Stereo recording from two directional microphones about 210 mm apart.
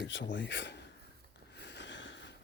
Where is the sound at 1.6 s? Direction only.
55° left (ahead or behind).